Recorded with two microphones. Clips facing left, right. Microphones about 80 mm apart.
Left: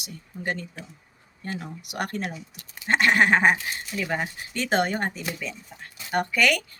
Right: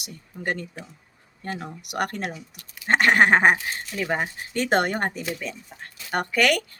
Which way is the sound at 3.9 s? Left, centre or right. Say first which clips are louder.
Right 2 dB; right.